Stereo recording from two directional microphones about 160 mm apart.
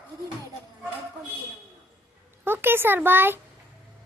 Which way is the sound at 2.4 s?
15° right (ahead or behind).